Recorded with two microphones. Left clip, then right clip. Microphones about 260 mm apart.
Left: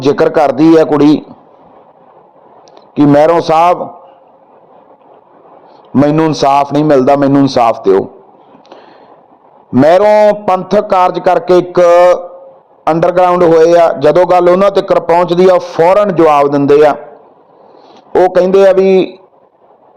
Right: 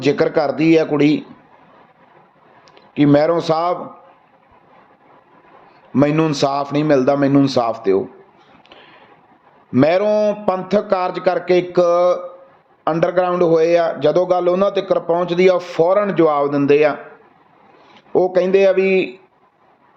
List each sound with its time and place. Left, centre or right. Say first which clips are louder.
0.0 s a man's voice: left 8 dB; centre
2.7 s speech: left 7 dB; centre
5.9 s a man's voice: left 6 dB; centre
9.7 s a man's voice: left 9 dB; centre
18.1 s a man's voice: left 7 dB; centre